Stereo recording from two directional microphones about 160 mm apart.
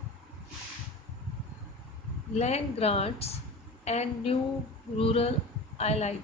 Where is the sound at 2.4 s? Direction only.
40° left (ahead or behind).